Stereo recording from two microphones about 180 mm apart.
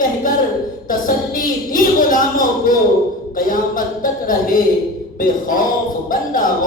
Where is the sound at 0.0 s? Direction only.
50° left (ahead or behind).